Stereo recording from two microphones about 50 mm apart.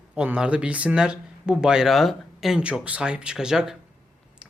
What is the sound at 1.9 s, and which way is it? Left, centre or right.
Speech, centre.